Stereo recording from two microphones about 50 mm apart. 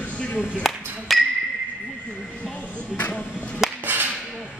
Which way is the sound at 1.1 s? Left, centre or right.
Centre.